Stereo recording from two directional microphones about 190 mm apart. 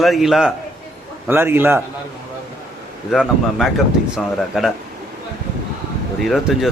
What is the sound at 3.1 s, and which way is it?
Speech, centre (ahead or behind).